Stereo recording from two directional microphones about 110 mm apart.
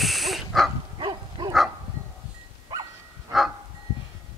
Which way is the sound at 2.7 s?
40° right (ahead or behind).